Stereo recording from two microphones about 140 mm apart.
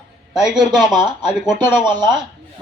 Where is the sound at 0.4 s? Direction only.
5° right (ahead or behind).